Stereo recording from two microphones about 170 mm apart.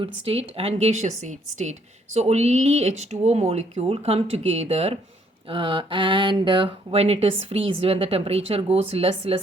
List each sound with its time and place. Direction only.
0.3 s speech: 35° right (ahead or behind)